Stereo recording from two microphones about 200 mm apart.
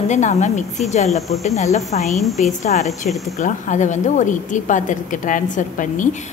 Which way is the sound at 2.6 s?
35° left (ahead or behind).